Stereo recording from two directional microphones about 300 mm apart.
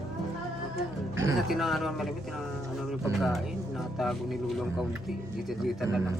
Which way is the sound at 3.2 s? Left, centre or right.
Centre.